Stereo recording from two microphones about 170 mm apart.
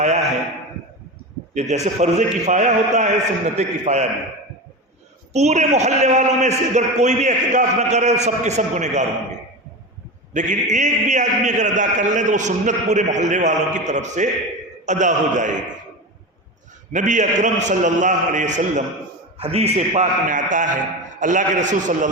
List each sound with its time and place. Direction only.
0.0 s a sound: 40° right (ahead or behind)
1.5 s a man's voice: 40° right (ahead or behind)
5.3 s a man's voice: 40° right (ahead or behind)
16.9 s a man's voice: 45° right (ahead or behind)